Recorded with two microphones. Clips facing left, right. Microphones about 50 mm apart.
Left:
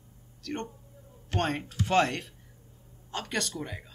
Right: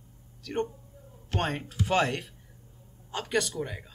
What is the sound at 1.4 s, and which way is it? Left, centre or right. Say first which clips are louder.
Speech: left 1 dB; centre.